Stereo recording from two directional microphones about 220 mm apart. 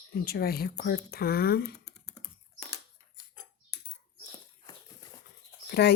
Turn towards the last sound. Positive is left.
turn(degrees=50)  # may be behind; listen again after turning